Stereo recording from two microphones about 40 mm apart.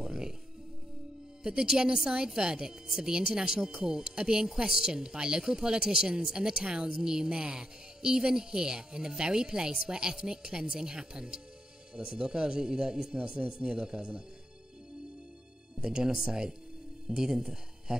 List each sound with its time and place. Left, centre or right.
0.0 s music: centre
1.4 s speech: centre
15.8 s speech: centre